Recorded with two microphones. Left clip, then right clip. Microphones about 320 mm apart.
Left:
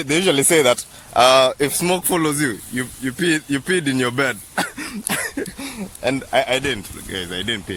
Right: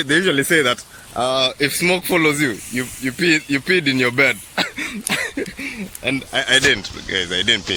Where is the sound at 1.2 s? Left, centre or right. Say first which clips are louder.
Left 6 dB; left.